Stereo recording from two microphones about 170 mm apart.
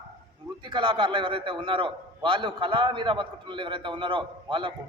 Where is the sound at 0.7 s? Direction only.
30° right (ahead or behind).